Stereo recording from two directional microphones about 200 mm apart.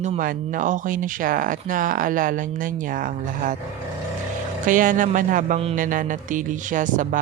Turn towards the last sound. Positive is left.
turn(degrees=-40)  # may be behind; listen again after turning